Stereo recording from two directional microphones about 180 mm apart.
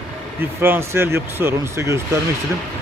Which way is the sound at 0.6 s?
15° right (ahead or behind).